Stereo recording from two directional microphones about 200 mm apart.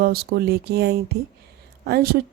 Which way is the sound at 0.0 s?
50° right (ahead or behind).